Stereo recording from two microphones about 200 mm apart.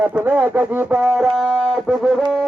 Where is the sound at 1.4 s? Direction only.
Centre (ahead or behind).